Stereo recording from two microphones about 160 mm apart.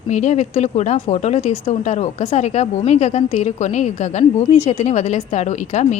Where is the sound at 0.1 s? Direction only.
45° left (ahead or behind).